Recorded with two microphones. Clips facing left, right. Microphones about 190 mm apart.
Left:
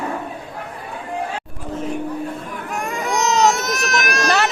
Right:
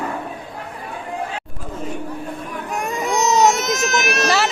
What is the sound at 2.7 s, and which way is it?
Baby cry, 20° right (ahead or behind).